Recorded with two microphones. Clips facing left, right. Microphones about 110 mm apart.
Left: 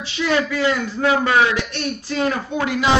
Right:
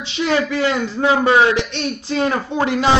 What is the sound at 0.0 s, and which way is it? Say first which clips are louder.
Speech: right 2 dB; 25° right (ahead or behind).